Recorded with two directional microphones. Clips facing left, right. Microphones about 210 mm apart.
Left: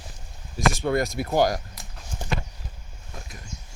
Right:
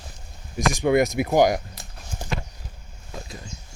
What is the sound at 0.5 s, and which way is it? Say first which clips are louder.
Speech: right 4 dB; 15° right (ahead or behind).